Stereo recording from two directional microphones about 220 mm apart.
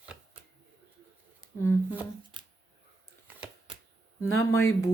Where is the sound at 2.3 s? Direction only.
20° right (ahead or behind).